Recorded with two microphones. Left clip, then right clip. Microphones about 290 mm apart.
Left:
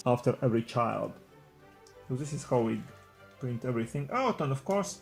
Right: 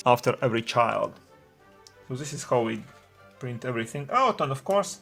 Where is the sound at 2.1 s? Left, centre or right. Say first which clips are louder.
Right 4 dB; right.